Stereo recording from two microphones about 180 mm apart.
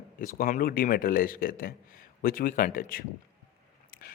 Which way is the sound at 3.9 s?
55° left (ahead or behind).